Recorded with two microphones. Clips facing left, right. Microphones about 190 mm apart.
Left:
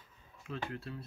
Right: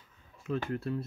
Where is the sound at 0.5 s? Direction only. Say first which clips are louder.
Right 8 dB; 50° right (ahead or behind).